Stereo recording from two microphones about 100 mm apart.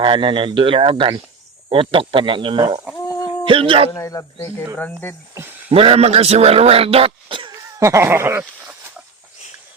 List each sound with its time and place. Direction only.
0.0 s speech: 55° right (ahead or behind)
3.1 s a sound: 35° left (ahead or behind)
3.4 s speech: 60° right (ahead or behind)
3.9 s speech: 30° left (ahead or behind)
4.8 s speech: 15° left (ahead or behind)
5.3 s a sound: 20° right (ahead or behind)
5.7 s a man's voice: 75° right (ahead or behind); by 7.5 s 55° right (ahead or behind)
7.5 s snicker: 30° right (ahead or behind)